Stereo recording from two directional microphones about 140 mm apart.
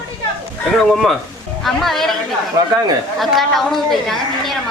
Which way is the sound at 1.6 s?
Centre (ahead or behind).